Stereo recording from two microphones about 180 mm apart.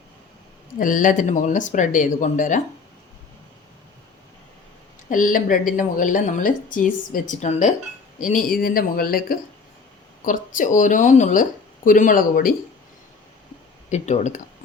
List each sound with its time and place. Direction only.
0.8 s a woman's voice: 45° left (ahead or behind)
5.0 s a woman's voice: 50° left (ahead or behind)
13.9 s speech: 40° left (ahead or behind)